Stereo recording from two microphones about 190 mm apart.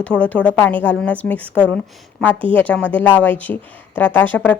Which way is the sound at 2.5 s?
5° left (ahead or behind).